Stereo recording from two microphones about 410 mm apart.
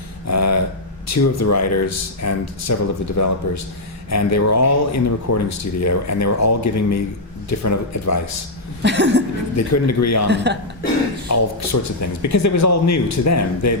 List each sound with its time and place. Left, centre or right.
0.3 s a man's voice: left
8.8 s chuckle: right
9.6 s speech: left
10.2 s chuckle: right
11.3 s speech: left